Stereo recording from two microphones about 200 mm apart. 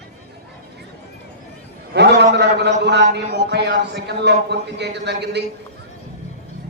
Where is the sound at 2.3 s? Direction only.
60° right (ahead or behind).